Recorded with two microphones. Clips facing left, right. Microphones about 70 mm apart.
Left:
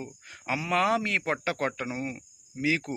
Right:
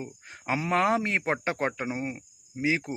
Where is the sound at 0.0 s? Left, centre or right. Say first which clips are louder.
Right 1 dB; right.